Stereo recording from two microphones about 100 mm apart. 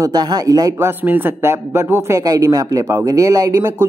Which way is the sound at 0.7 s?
20° right (ahead or behind).